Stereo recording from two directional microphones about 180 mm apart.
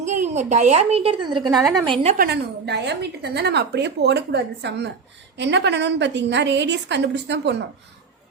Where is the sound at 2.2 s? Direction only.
65° right (ahead or behind).